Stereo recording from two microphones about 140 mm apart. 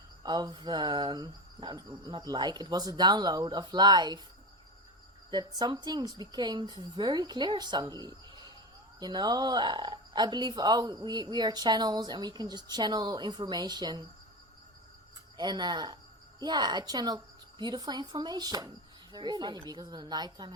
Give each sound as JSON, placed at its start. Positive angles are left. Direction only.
{"t": 0.2, "sound": "a woman's voice", "side_deg": -30}
{"t": 5.3, "sound": "a woman's voice", "side_deg": -30}
{"t": 15.4, "sound": "a woman's voice", "side_deg": -30}